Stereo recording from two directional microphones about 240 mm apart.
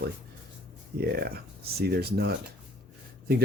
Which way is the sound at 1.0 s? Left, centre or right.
Right.